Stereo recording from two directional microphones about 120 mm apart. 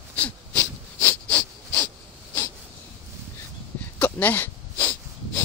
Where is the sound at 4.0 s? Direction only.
15° left (ahead or behind).